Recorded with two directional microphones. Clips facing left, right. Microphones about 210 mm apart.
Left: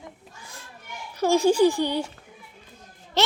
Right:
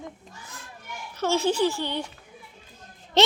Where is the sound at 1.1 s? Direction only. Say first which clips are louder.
Left 5 dB; 15° left (ahead or behind).